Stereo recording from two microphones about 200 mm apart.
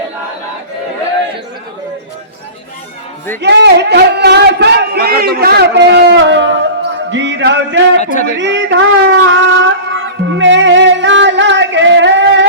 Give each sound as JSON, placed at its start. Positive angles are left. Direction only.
{"t": 3.4, "sound": "speech", "side_deg": -60}
{"t": 7.1, "sound": "a sound", "side_deg": -65}
{"t": 8.0, "sound": "speech", "side_deg": 40}
{"t": 8.4, "sound": "wind instrument", "side_deg": -60}